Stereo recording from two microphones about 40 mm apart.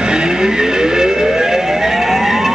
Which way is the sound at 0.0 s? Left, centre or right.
Right.